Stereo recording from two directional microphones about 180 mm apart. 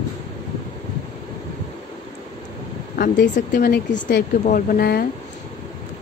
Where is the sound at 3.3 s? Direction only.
55° left (ahead or behind).